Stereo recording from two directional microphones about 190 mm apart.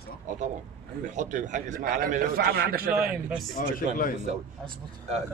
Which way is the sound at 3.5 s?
50° left (ahead or behind).